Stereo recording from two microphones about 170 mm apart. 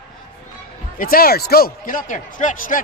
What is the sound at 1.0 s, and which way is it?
Speech, 60° left (ahead or behind).